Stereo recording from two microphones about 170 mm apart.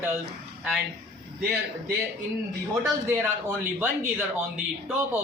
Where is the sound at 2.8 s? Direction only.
15° right (ahead or behind).